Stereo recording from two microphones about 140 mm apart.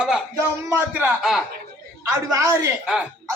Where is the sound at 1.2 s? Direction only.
Centre (ahead or behind).